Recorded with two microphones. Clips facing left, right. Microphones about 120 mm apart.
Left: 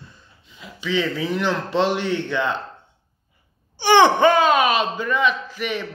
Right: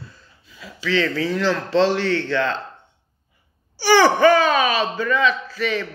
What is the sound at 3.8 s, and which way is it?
Speech, 20° left (ahead or behind).